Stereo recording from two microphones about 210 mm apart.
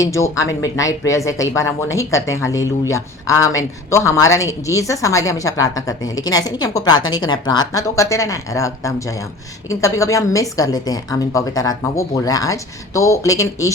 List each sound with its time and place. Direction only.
0.0 s a woman's voice: 15° left (ahead or behind)